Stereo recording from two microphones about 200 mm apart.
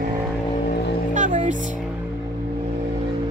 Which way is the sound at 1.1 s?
40° right (ahead or behind).